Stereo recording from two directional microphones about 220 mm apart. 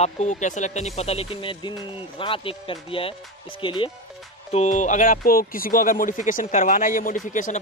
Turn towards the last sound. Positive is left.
turn(degrees=35)  # may be behind; listen again after turning